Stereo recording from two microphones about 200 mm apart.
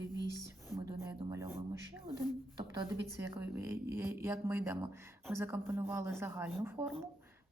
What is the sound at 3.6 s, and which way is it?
Speech, 10° right (ahead or behind).